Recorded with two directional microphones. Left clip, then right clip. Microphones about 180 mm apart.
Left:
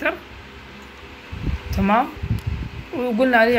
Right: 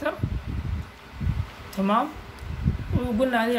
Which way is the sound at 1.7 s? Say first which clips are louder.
Left 5 dB; 15° left (ahead or behind).